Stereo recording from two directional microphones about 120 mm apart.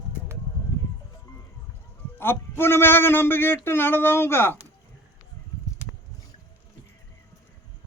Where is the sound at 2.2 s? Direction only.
20° left (ahead or behind).